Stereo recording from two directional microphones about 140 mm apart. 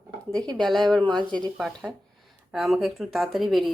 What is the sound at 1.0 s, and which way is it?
Speech, 30° right (ahead or behind).